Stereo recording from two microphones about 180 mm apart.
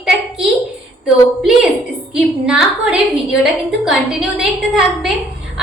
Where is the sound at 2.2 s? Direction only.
5° right (ahead or behind).